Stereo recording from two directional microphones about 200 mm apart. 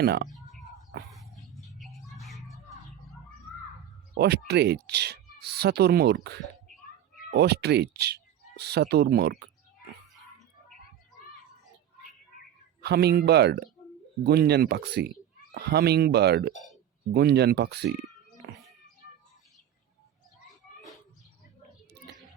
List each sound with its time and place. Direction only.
0.0 s speech: 55° right (ahead or behind)
0.3 s a sound: centre (ahead or behind)
1.8 s music: centre (ahead or behind)
4.2 s speech: 55° right (ahead or behind)
12.8 s speech: 55° right (ahead or behind)